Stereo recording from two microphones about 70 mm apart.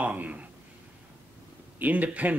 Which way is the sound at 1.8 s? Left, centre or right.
Right.